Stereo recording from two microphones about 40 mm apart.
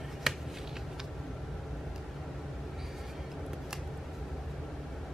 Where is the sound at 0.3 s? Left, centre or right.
Centre.